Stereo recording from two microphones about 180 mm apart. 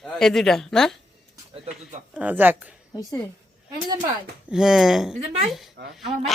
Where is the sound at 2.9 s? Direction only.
20° left (ahead or behind).